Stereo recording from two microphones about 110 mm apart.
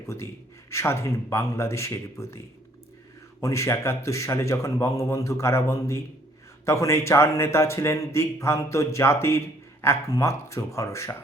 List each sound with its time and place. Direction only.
0.7 s speech: 25° left (ahead or behind)
3.4 s speech: 25° left (ahead or behind)